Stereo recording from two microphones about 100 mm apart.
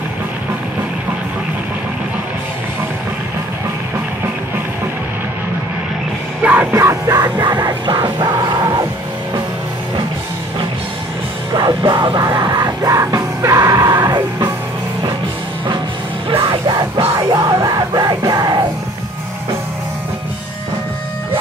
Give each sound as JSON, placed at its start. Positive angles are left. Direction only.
{"t": 6.4, "sound": "music", "side_deg": -15}
{"t": 11.5, "sound": "music", "side_deg": -45}
{"t": 16.6, "sound": "music", "side_deg": -45}